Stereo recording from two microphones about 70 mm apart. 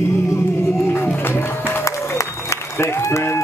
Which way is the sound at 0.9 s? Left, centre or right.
Left.